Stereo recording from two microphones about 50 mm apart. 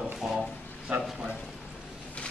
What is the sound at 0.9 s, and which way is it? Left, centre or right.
Speech, right.